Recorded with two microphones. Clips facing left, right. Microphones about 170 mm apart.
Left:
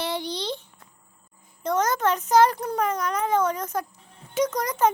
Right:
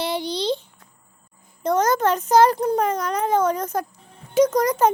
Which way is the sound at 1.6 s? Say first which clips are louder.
Right 4 dB; 35° right (ahead or behind).